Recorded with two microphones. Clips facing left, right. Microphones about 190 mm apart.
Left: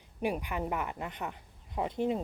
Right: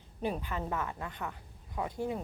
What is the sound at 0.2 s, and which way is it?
A woman's voice, 15° left (ahead or behind).